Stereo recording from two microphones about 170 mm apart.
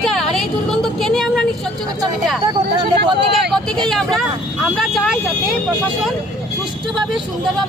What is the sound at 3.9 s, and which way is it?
Speech, centre (ahead or behind).